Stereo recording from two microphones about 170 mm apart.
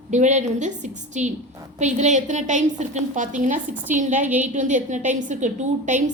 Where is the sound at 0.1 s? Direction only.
45° right (ahead or behind).